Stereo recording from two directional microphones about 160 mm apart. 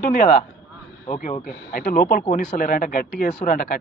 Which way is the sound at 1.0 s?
40° left (ahead or behind).